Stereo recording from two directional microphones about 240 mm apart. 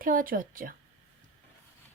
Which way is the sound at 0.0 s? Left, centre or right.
Right.